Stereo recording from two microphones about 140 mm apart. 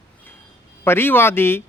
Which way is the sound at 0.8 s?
15° left (ahead or behind).